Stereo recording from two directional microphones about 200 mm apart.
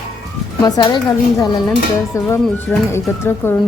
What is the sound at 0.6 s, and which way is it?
A woman's voice, 20° left (ahead or behind).